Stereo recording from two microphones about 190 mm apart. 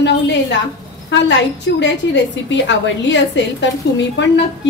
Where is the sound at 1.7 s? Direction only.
70° left (ahead or behind).